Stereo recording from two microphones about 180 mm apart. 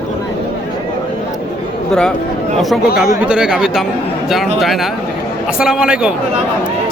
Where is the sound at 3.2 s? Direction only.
5° right (ahead or behind).